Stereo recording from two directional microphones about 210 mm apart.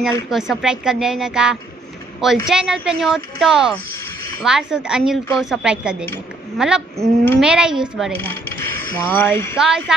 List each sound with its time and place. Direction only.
0.0 s speech: centre (ahead or behind)
8.2 s speech: 10° left (ahead or behind)
9.6 s speech: centre (ahead or behind)